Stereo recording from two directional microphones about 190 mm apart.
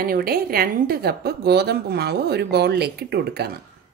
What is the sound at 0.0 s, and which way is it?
A woman's voice, 50° right (ahead or behind).